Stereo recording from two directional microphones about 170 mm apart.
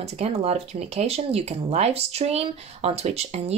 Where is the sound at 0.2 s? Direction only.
35° right (ahead or behind).